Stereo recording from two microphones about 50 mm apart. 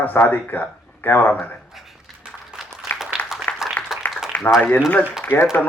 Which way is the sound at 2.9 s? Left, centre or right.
Left.